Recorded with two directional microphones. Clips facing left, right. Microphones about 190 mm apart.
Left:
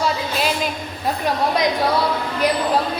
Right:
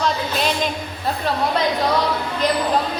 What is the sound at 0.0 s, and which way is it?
Music, 5° left (ahead or behind).